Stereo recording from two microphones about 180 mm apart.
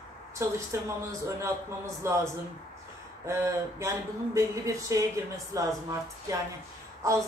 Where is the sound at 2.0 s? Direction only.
15° right (ahead or behind).